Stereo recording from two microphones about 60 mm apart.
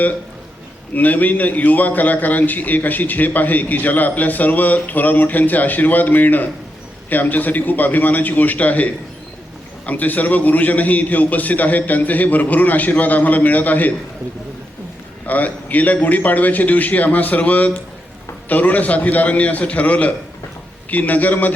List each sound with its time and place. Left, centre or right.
0.9 s a man's voice: left
15.3 s a man's voice: left